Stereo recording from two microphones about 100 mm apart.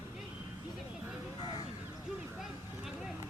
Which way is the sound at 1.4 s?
60° left (ahead or behind).